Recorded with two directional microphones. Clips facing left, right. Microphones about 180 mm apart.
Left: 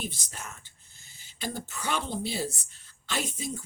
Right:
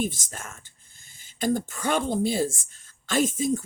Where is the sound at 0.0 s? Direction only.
50° right (ahead or behind).